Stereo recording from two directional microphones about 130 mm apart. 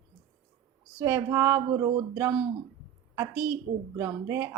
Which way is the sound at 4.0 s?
20° right (ahead or behind).